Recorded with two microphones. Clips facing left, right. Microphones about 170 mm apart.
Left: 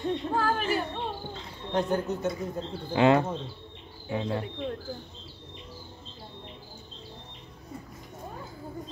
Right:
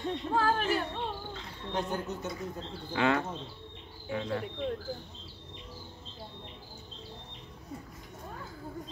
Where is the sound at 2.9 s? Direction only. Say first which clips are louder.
Left 7 dB; 25° left (ahead or behind).